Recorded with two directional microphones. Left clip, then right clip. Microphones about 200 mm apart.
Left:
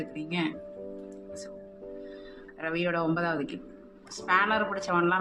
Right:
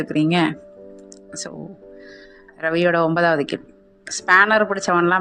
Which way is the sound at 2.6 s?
40° right (ahead or behind).